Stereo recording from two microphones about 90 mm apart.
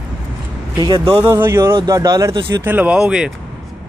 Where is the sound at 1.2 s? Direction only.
25° right (ahead or behind).